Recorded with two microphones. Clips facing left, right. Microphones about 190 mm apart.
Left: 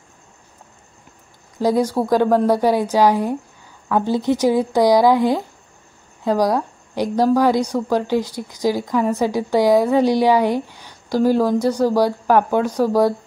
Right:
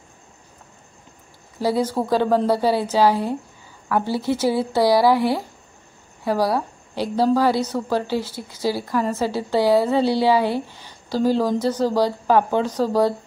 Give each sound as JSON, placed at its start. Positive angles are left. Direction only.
{"t": 1.6, "sound": "a woman's voice", "side_deg": 15}